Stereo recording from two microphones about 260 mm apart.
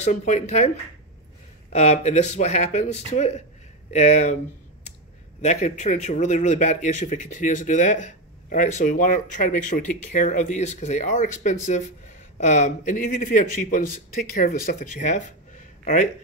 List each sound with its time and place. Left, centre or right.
0.0 s a man's voice: left
1.7 s a man's voice: left
5.4 s a man's voice: left